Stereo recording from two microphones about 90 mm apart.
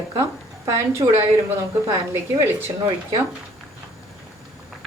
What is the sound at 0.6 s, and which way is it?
Speech, 30° right (ahead or behind).